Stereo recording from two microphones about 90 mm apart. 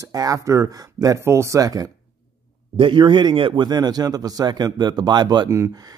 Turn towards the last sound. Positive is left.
turn(degrees=-55)  # may be behind; listen again after turning